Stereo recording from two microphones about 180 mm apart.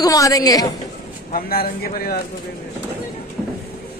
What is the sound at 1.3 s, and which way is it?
Speech, 55° left (ahead or behind).